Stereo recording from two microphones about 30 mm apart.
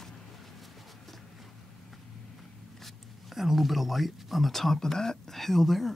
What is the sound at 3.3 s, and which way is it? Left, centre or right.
Speech, centre.